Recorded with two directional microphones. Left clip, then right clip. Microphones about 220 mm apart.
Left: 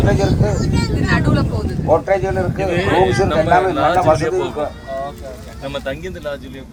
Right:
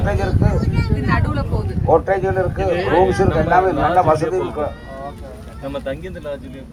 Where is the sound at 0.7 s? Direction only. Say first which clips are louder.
Left 2 dB; 45° left (ahead or behind); by 6.4 s 30° left (ahead or behind).